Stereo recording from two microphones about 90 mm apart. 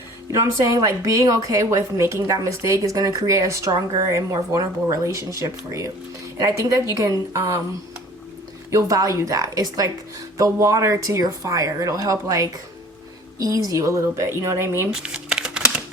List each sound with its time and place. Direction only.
0.3 s a woman's voice: 35° right (ahead or behind)
8.7 s a woman's voice: 40° right (ahead or behind)
15.0 s a sound: 10° right (ahead or behind)